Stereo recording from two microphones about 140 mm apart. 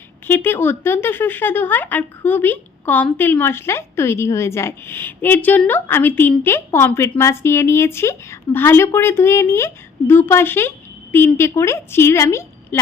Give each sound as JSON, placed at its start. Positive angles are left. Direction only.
{"t": 0.3, "sound": "a woman's voice", "side_deg": 15}